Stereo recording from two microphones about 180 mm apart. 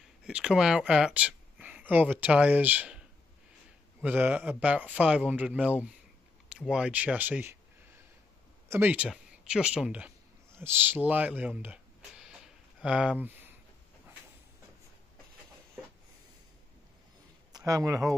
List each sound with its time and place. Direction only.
0.2 s speech: 5° right (ahead or behind)
4.0 s speech: 10° right (ahead or behind)
8.6 s speech: 10° right (ahead or behind)
12.8 s speech: 5° right (ahead or behind)
17.5 s speech: 20° right (ahead or behind)